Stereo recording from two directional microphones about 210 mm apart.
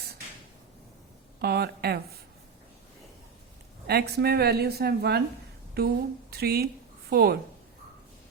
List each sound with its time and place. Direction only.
1.4 s a woman's voice: 50° right (ahead or behind)
3.8 s a woman's voice: 50° right (ahead or behind)